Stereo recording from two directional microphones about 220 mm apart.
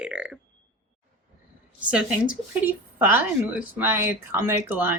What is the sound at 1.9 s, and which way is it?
A woman's voice, 5° right (ahead or behind).